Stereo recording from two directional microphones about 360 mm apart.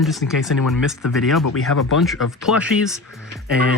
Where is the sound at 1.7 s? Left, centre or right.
Left.